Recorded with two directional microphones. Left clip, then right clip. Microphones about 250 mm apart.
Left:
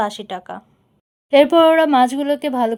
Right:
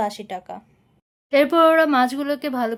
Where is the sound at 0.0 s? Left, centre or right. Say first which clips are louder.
Left 3 dB; centre.